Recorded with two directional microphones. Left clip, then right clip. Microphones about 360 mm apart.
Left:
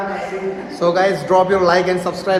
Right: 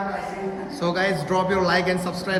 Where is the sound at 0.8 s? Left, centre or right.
Centre.